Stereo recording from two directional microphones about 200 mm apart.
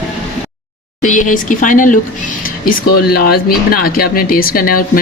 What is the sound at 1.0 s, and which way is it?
Speech, 40° left (ahead or behind).